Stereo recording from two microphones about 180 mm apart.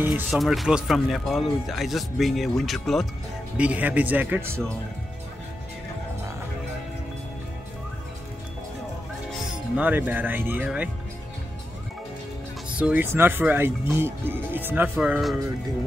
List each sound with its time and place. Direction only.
0.0 s speech: centre (ahead or behind)
9.8 s speech: 10° right (ahead or behind)
12.6 s speech: 5° right (ahead or behind)